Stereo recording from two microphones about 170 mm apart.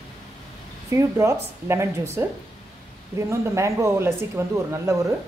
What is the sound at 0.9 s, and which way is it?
Speech, 15° right (ahead or behind).